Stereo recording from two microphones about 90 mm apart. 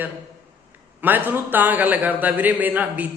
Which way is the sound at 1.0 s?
20° right (ahead or behind).